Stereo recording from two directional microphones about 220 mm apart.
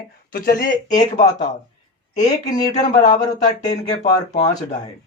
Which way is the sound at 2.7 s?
35° left (ahead or behind).